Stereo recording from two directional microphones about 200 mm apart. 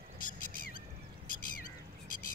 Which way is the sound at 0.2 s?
45° left (ahead or behind).